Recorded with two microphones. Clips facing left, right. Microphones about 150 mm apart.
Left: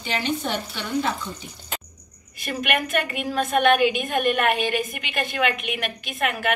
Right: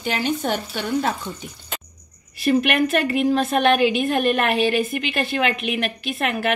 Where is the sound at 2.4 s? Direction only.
30° right (ahead or behind).